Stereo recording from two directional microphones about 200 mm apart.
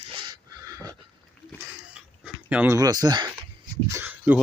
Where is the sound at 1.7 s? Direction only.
5° right (ahead or behind).